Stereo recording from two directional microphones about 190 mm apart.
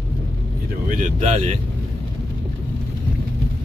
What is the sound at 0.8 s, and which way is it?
Speech, 40° right (ahead or behind).